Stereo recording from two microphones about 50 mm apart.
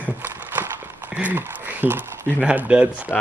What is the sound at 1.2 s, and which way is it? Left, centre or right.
Speech, right.